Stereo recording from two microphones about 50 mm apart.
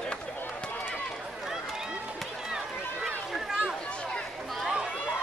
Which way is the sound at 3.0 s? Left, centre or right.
Centre.